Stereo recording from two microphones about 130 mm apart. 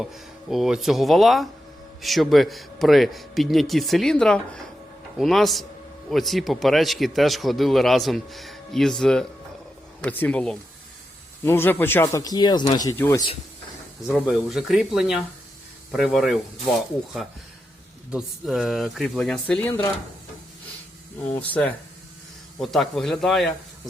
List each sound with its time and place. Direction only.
0.0 s speech: 5° right (ahead or behind); by 13.0 s 30° left (ahead or behind)
13.0 s speech: 20° left (ahead or behind)
14.1 s speech: centre (ahead or behind)
18.1 s speech: centre (ahead or behind); by 19.9 s 15° left (ahead or behind)
21.4 s speech: 10° left (ahead or behind)
22.6 s speech: centre (ahead or behind)